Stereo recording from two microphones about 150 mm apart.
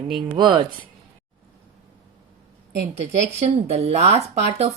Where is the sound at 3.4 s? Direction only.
45° right (ahead or behind).